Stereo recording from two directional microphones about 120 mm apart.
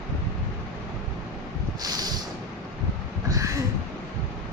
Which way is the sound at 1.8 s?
30° right (ahead or behind).